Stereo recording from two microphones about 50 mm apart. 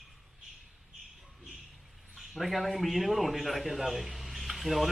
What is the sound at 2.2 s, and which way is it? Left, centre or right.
A man's voice, centre.